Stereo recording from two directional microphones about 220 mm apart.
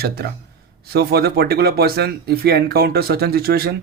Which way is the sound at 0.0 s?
45° right (ahead or behind).